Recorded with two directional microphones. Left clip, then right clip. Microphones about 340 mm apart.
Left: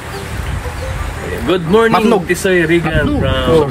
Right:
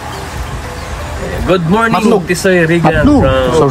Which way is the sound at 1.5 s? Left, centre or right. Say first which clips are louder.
Even; right.